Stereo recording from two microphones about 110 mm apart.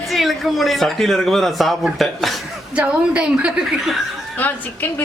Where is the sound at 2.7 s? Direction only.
10° right (ahead or behind).